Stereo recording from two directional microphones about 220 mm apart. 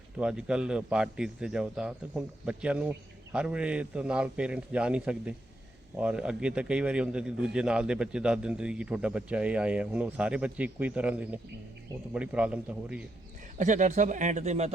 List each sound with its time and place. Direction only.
0.2 s a man's voice: 5° right (ahead or behind)
13.6 s speech: 35° right (ahead or behind)